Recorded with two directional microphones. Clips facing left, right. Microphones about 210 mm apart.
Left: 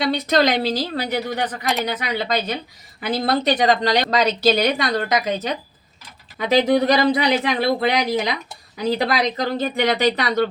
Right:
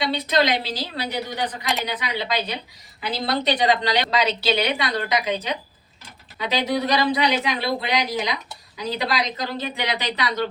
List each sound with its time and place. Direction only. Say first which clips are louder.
0.0 s a woman's voice: left 3 dB; 45° left (ahead or behind)